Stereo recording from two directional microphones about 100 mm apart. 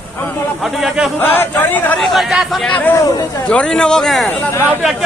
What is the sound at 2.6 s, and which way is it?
Speech, 15° left (ahead or behind).